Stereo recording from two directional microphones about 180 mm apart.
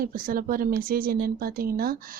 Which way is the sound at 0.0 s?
50° right (ahead or behind).